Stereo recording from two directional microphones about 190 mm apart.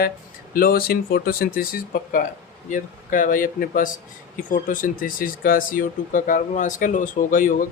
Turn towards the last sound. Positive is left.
turn(degrees=45)  # may be behind; listen again after turning